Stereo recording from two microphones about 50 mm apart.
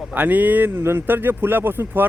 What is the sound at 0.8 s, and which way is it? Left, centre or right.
Speech, right.